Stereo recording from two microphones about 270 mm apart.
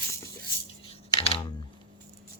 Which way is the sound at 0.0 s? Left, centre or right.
Centre.